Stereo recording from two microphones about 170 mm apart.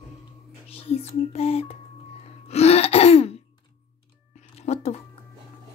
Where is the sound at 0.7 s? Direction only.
35° left (ahead or behind).